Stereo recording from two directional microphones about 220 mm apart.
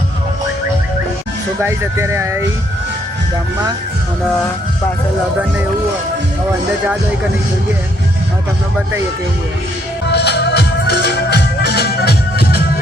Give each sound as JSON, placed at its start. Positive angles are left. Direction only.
{"t": 1.6, "sound": "speech", "side_deg": -10}
{"t": 10.1, "sound": "music", "side_deg": 50}